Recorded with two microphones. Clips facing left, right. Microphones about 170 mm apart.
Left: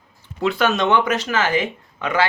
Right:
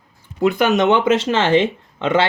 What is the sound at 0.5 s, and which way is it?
Speech, 20° right (ahead or behind).